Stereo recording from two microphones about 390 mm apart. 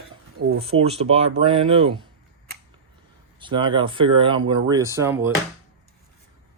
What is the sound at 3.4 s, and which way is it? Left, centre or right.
Speech, centre.